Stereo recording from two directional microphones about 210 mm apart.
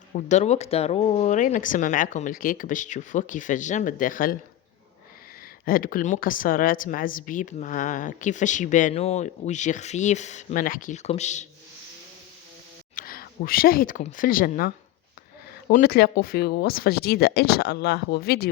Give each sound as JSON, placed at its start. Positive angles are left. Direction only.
{"t": 0.1, "sound": "speech", "side_deg": 35}
{"t": 5.6, "sound": "speech", "side_deg": 40}
{"t": 13.0, "sound": "speech", "side_deg": 45}
{"t": 15.7, "sound": "speech", "side_deg": 45}